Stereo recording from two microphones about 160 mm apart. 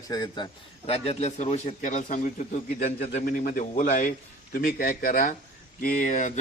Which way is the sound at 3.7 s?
55° left (ahead or behind).